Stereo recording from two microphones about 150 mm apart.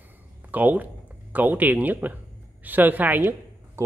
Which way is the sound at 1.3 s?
10° right (ahead or behind).